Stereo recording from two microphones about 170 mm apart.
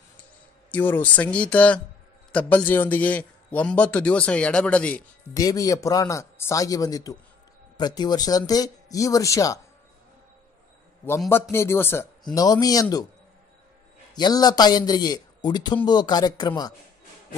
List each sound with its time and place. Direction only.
0.2 s a man's voice: 10° left (ahead or behind)
5.3 s speech: 20° left (ahead or behind)
11.5 s a man's voice: 15° left (ahead or behind)
14.1 s speech: 25° left (ahead or behind)